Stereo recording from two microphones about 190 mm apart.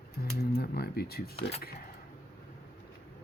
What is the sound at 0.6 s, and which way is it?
Speech, 55° left (ahead or behind).